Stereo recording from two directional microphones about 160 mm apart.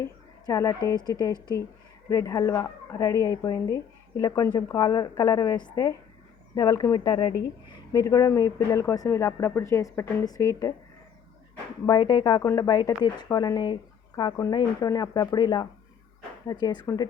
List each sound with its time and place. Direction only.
0.0 s a sound: 20° left (ahead or behind)
0.9 s speech: 25° left (ahead or behind)
11.9 s speech: 25° left (ahead or behind)